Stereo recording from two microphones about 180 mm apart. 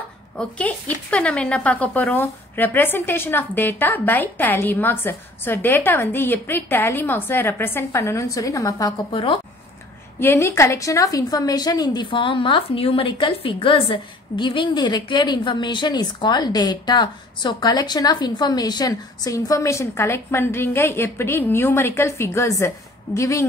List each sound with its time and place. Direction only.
0.4 s speech: 5° left (ahead or behind)
9.1 s a woman's voice: 30° left (ahead or behind)
10.2 s a woman's voice: 15° left (ahead or behind)